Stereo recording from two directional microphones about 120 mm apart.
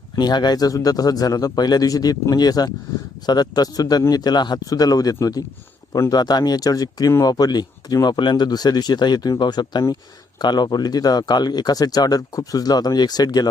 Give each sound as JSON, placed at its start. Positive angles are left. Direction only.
{"t": 0.2, "sound": "speech", "side_deg": 35}